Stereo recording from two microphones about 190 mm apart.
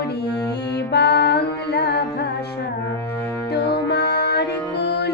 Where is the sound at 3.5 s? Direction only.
60° left (ahead or behind).